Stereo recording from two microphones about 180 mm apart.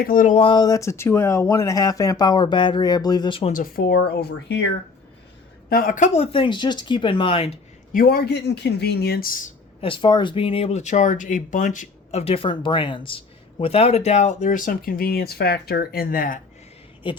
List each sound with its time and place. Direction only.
0.0 s speech: 50° left (ahead or behind)
0.3 s speech: 25° left (ahead or behind)
3.5 s speech: 55° left (ahead or behind)
5.6 s speech: 55° left (ahead or behind)
6.3 s speech: 25° left (ahead or behind)
7.9 s speech: 55° left (ahead or behind)
9.8 s speech: 30° left (ahead or behind); by 16.4 s 50° left (ahead or behind)
17.0 s speech: 25° left (ahead or behind)